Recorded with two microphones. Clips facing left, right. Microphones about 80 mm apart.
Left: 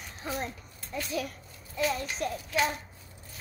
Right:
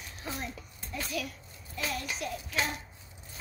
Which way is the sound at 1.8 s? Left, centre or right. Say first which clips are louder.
Left 7 dB; left.